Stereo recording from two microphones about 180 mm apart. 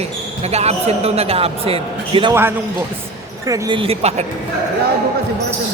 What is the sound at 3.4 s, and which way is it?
Speech, 20° right (ahead or behind).